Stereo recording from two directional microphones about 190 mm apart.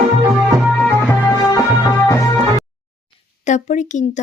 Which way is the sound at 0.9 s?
15° left (ahead or behind).